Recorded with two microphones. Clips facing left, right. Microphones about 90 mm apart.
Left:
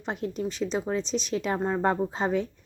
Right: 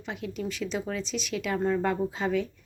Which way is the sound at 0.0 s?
40° left (ahead or behind).